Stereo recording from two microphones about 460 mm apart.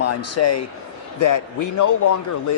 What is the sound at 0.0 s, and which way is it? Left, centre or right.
Speech, left.